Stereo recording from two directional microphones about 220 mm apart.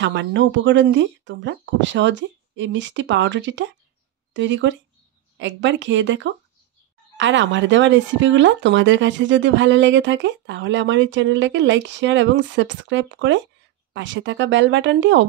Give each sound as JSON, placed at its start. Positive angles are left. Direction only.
{"t": 0.0, "sound": "speech", "side_deg": -55}